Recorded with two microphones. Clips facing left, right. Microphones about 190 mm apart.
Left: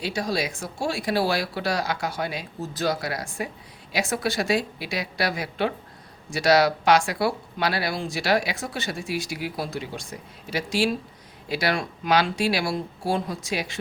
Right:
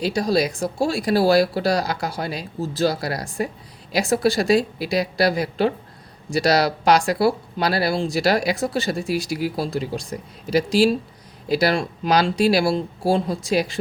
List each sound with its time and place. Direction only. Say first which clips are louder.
0.0 s speech: right 7 dB; 35° right (ahead or behind)